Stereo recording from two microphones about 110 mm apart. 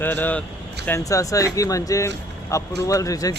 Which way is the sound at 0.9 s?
30° left (ahead or behind).